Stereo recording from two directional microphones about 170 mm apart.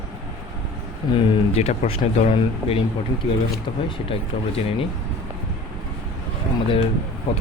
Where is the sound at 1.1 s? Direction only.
35° left (ahead or behind).